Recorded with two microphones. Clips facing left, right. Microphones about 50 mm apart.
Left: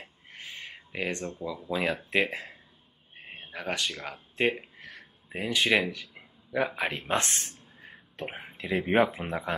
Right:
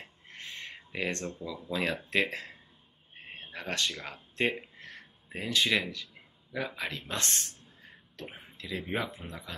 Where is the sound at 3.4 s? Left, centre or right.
Centre; by 7.4 s left.